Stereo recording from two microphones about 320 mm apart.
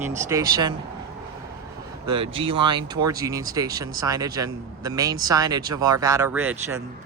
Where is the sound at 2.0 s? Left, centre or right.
Centre.